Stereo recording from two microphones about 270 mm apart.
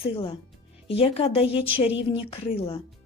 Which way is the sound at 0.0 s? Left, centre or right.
Left.